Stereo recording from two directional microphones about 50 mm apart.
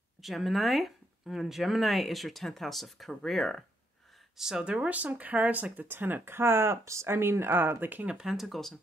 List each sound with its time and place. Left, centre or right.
0.2 s speech: centre
4.4 s speech: centre
4.6 s speech: right
8.1 s speech: centre